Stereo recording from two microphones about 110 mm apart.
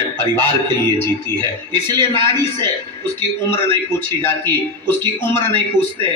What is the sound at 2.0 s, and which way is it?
Speech, 50° right (ahead or behind).